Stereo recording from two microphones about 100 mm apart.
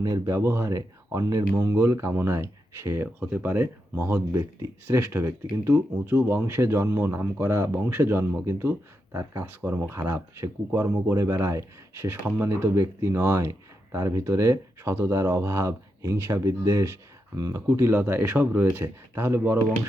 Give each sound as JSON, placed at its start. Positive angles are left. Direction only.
{"t": 0.0, "sound": "speech", "side_deg": -35}